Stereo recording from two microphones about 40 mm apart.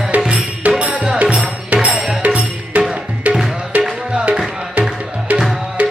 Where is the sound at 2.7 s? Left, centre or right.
Right.